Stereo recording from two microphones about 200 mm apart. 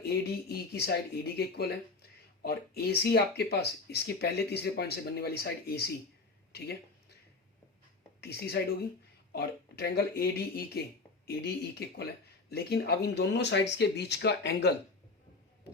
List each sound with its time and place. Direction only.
0.3 s speech: 55° left (ahead or behind)
8.2 s speech: 55° left (ahead or behind)